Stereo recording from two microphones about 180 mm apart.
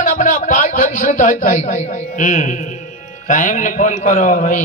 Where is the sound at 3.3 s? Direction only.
45° left (ahead or behind).